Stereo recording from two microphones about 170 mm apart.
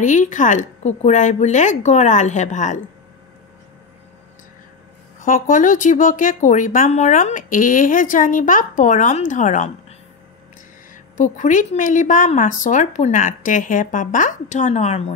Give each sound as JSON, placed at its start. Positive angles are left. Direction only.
{"t": 0.0, "sound": "speech", "side_deg": 45}
{"t": 5.2, "sound": "speech", "side_deg": 50}
{"t": 11.1, "sound": "speech", "side_deg": 45}